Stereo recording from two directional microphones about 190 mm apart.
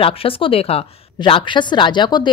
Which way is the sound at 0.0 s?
30° left (ahead or behind).